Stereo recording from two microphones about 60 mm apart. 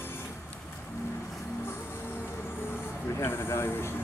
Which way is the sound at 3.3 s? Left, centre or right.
Left.